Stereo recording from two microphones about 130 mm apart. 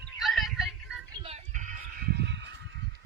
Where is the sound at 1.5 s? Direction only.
75° right (ahead or behind).